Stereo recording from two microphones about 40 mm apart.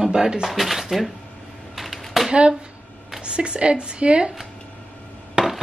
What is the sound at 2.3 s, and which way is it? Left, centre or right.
Speech, right.